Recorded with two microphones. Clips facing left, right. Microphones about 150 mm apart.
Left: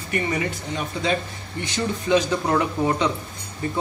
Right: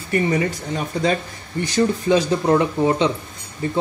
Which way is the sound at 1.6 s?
35° right (ahead or behind).